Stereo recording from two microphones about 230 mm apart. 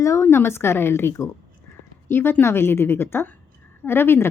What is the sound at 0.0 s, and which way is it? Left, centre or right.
A woman's voice, centre.